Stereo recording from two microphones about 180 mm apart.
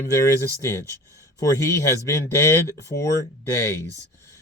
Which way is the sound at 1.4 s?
15° left (ahead or behind).